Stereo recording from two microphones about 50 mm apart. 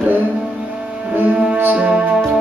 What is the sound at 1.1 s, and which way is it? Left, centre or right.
Music, right.